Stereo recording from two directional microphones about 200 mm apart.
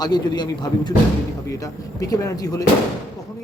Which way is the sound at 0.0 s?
20° left (ahead or behind).